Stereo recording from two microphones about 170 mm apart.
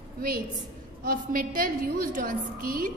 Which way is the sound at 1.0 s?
55° right (ahead or behind).